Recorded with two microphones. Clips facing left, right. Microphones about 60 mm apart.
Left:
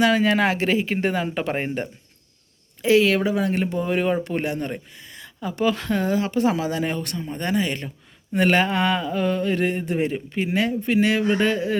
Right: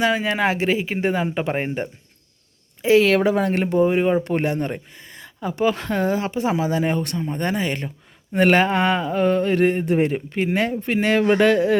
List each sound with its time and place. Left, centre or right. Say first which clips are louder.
0.0 s speech: left 1 dB; right
2.8 s mantra: right 2 dB; right
3.8 s speech: right 1 dB; centre
4.2 s mantra: right 3 dB; right
6.3 s speech: even; right
8.3 s mantra: right 3 dB; right